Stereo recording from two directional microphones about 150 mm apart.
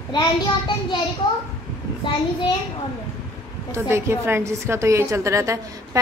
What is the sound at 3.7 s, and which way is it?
A woman's voice, 15° right (ahead or behind).